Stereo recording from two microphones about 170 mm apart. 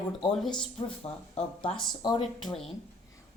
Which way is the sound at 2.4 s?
Centre (ahead or behind).